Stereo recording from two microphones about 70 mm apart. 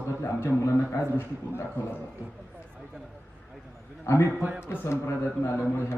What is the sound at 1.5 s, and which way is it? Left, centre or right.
Speech, left.